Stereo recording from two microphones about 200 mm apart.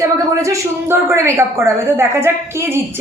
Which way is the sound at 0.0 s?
15° right (ahead or behind).